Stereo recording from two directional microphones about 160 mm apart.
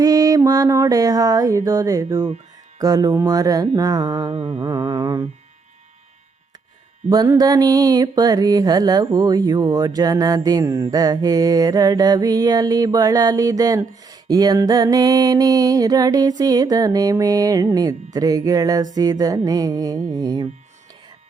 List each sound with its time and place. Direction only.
0.0 s mantra: 20° right (ahead or behind)
7.1 s mantra: 25° right (ahead or behind)